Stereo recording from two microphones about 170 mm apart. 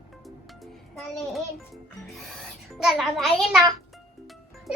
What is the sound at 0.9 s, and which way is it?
A child's voice, centre (ahead or behind).